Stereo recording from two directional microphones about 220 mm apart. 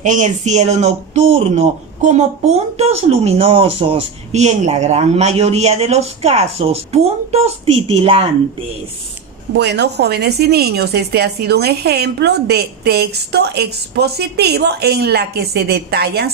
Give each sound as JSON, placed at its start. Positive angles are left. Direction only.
{"t": 0.0, "sound": "speech", "side_deg": -35}
{"t": 9.5, "sound": "a woman's voice", "side_deg": -50}